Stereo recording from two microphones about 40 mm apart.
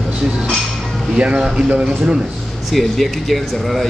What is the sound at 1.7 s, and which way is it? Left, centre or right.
Speech, right.